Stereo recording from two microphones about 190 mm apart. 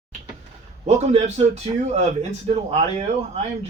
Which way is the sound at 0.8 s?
35° right (ahead or behind).